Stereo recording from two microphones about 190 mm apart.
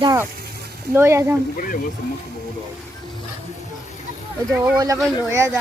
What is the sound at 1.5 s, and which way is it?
Speech, 45° left (ahead or behind).